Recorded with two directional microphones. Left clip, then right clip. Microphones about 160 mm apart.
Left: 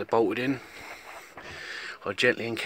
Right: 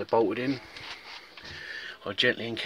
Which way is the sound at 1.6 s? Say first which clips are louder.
Left 2 dB; 25° left (ahead or behind).